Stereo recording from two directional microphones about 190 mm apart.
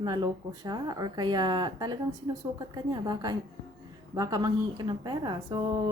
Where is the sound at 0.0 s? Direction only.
20° right (ahead or behind).